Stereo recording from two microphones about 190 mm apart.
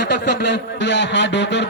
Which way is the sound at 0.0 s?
60° left (ahead or behind).